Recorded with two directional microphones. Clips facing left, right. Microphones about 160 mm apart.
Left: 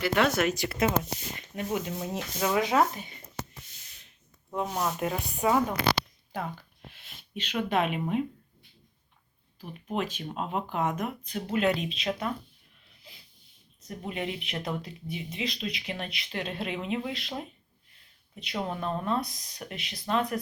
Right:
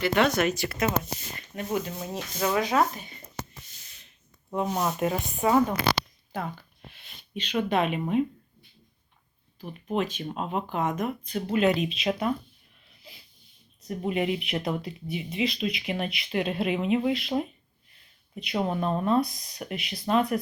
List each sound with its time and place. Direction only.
0.0 s speech: 5° left (ahead or behind)
0.6 s speech: 25° left (ahead or behind)
1.4 s speech: 15° left (ahead or behind)
2.0 s speech: centre (ahead or behind)
2.6 s speech: 20° left (ahead or behind)
4.6 s speech: 10° right (ahead or behind)
7.0 s speech: 5° left (ahead or behind)
9.9 s speech: 5° left (ahead or behind)
13.8 s speech: 10° right (ahead or behind)